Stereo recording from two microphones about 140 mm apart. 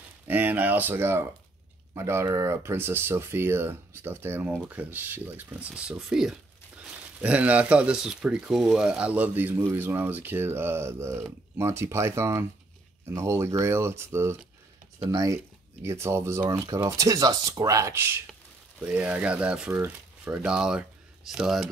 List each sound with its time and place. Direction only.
0.3 s speech: 10° right (ahead or behind)